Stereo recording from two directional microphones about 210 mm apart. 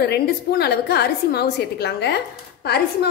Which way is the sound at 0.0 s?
50° left (ahead or behind).